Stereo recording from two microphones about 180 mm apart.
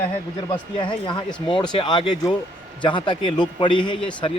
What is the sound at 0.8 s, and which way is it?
A man's voice, 25° left (ahead or behind).